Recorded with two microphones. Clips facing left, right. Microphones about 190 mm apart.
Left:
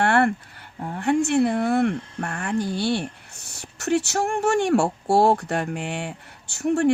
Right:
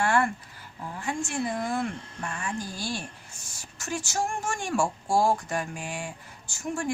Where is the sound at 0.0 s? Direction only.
65° left (ahead or behind).